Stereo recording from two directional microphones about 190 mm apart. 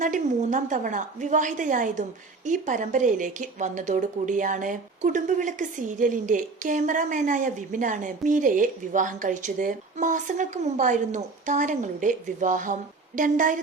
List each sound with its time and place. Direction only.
0.0 s a woman's voice: 40° right (ahead or behind)